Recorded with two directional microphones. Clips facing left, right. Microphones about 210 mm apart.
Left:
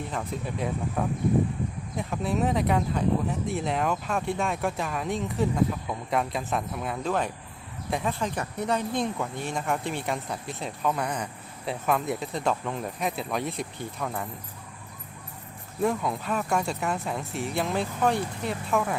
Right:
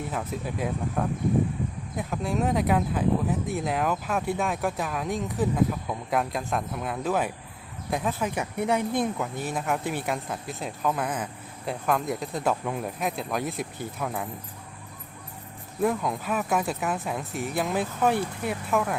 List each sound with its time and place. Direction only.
0.1 s speech: 5° right (ahead or behind)
15.8 s speech: centre (ahead or behind)